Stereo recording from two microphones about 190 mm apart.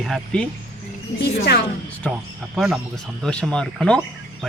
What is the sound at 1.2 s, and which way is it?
Speech, 60° left (ahead or behind).